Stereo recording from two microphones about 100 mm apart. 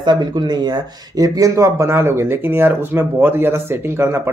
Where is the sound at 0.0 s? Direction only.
45° right (ahead or behind).